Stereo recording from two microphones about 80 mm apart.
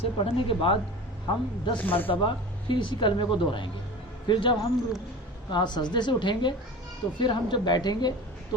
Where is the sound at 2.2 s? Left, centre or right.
Left.